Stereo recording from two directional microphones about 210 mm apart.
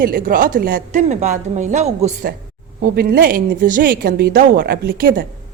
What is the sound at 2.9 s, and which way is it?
Speech, 45° right (ahead or behind).